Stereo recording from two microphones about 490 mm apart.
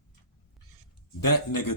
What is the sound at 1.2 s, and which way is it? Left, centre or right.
Speech, left.